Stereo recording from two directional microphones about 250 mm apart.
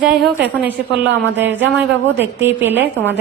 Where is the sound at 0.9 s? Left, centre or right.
Right.